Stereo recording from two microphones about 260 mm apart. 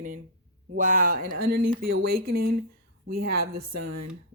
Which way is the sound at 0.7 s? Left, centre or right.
Right.